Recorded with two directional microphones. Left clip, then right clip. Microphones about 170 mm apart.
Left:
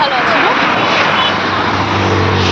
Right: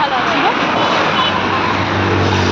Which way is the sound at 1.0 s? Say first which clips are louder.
Left 3 dB; 50° right (ahead or behind).